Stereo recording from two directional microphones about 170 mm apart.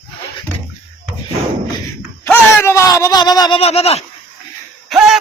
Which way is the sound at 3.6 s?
35° left (ahead or behind).